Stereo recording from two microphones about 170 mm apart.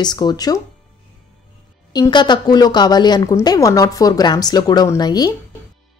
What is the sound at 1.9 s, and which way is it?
Speech, 25° left (ahead or behind).